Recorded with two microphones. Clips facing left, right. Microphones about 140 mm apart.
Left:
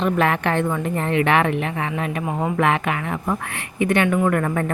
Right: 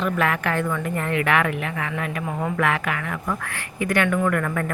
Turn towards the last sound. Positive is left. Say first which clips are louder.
# left 3 dB
turn(degrees=30)  # may be behind; listen again after turning